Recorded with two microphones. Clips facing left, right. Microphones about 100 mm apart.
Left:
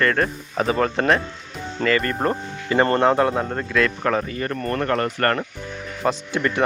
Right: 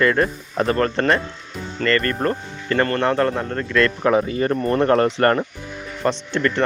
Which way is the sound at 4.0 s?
10° right (ahead or behind).